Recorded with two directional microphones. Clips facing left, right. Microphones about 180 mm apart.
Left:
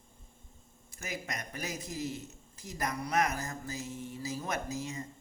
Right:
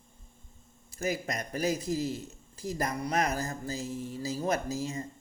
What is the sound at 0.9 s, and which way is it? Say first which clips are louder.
A man's voice: right 8 dB; 35° right (ahead or behind).